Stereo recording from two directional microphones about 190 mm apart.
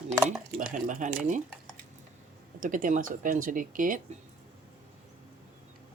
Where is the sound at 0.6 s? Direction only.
45° right (ahead or behind).